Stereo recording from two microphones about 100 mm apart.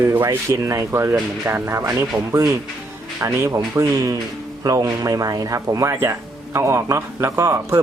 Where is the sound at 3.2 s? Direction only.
30° right (ahead or behind).